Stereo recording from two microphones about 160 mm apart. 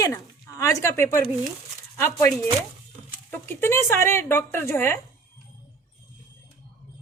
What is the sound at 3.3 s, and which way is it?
Speech, 15° left (ahead or behind).